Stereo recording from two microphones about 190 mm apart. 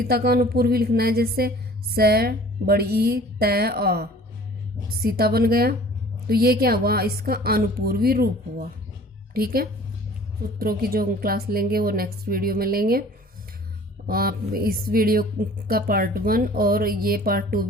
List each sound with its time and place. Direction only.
0.0 s a woman's voice: 55° right (ahead or behind)
14.1 s speech: 50° right (ahead or behind)